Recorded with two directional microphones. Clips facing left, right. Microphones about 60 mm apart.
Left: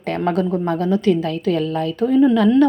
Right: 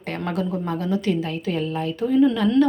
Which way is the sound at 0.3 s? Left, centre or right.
Left.